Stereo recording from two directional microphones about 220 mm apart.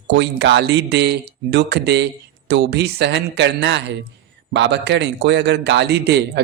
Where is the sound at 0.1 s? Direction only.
50° right (ahead or behind).